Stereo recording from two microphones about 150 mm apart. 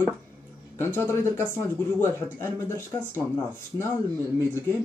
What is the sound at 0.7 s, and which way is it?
Speech, 15° left (ahead or behind).